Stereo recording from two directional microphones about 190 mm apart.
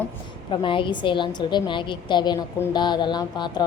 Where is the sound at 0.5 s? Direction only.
25° left (ahead or behind).